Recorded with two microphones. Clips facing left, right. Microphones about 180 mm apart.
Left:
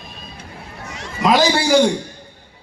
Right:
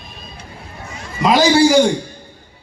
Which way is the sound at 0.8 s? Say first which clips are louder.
Left 1 dB; 85° left.